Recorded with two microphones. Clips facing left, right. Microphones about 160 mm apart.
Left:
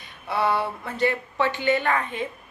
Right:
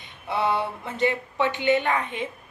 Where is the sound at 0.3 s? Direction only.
20° right (ahead or behind).